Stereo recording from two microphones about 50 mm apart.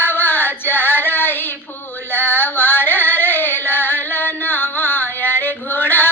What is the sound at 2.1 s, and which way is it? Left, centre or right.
Music, left.